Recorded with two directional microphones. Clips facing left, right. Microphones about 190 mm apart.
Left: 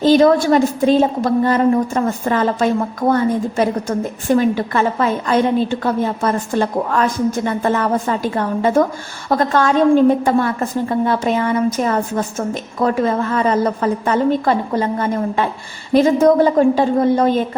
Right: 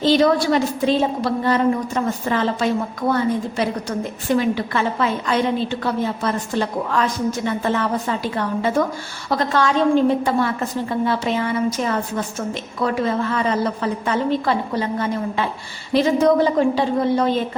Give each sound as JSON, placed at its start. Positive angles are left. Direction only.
{"t": 0.0, "sound": "a woman's voice", "side_deg": 45}